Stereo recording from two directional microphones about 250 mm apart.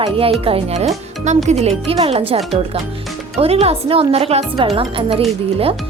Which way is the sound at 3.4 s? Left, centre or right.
Right.